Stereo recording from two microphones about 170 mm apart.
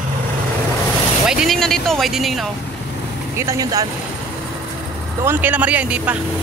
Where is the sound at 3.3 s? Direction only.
20° right (ahead or behind).